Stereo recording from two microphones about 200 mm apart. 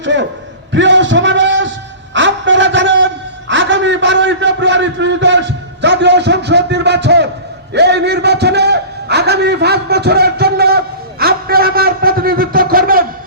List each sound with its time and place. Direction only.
0.0 s a man's voice: 65° right (ahead or behind)
0.7 s a sound: 65° right (ahead or behind)
7.7 s a man's voice: 55° right (ahead or behind)